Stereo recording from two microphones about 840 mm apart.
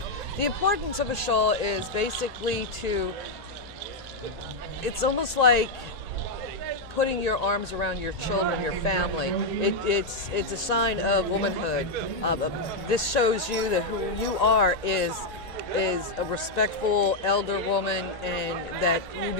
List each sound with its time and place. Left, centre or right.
0.3 s a man's voice: left
4.8 s a man's voice: left
7.0 s a man's voice: left